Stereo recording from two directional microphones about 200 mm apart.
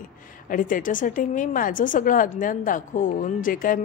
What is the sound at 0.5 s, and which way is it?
A woman's voice, 45° left (ahead or behind).